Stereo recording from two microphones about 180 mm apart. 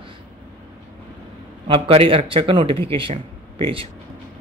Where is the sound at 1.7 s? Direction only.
30° right (ahead or behind).